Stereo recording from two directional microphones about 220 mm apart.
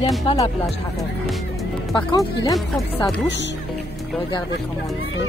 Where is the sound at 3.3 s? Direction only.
50° left (ahead or behind).